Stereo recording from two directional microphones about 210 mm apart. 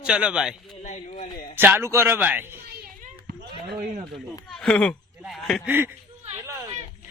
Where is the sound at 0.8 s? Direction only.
35° left (ahead or behind).